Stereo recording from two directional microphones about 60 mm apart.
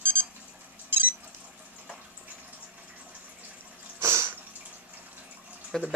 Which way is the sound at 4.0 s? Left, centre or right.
Right.